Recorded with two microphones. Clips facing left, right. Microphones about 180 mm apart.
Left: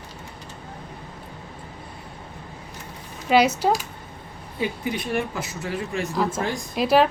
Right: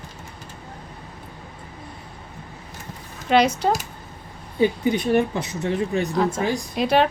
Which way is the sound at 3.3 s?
5° left (ahead or behind).